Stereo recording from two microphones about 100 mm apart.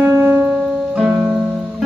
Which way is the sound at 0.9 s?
5° right (ahead or behind).